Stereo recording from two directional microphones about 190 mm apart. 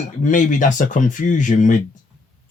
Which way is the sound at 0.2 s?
40° left (ahead or behind).